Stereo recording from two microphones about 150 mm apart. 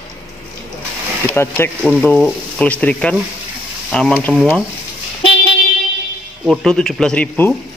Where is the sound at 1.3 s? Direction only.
15° left (ahead or behind).